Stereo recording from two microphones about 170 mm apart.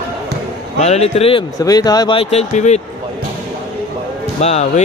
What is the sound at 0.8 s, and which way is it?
Speech, 40° left (ahead or behind).